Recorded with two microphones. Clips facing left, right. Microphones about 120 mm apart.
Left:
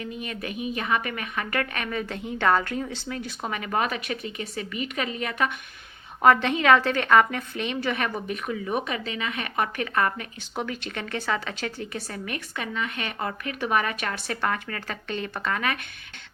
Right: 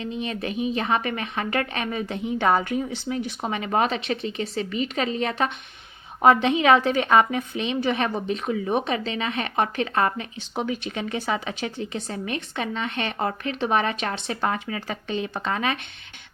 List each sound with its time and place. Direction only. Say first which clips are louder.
0.0 s a woman's voice: right 4 dB; 25° right (ahead or behind)
6.2 s a woman's voice: right 2 dB; 20° right (ahead or behind)